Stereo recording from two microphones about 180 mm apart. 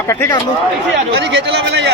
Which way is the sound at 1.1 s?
70° right (ahead or behind).